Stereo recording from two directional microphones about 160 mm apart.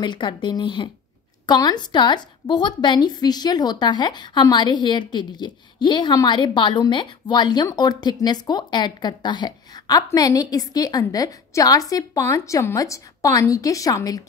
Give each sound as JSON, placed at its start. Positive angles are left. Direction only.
{"t": 0.0, "sound": "a woman's voice", "side_deg": 30}